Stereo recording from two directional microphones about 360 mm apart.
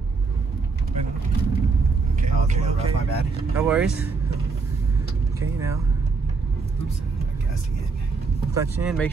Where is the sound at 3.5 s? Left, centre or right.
Centre.